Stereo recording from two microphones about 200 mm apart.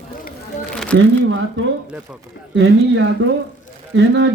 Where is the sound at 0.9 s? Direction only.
70° right (ahead or behind).